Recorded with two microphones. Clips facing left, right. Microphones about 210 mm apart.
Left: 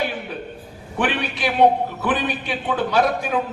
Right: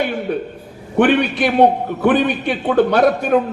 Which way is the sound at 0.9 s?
50° right (ahead or behind).